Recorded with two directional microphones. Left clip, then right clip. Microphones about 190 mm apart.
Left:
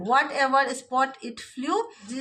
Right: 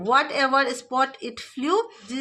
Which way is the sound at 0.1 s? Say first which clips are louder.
Right 1 dB; 30° right (ahead or behind).